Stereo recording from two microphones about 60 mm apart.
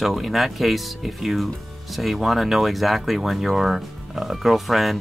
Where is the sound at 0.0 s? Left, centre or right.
Centre.